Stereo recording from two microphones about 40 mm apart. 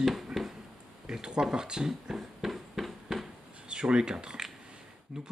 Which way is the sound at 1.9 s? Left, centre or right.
Centre.